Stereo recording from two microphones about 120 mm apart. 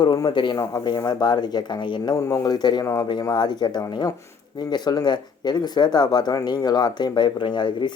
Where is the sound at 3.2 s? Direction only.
35° left (ahead or behind).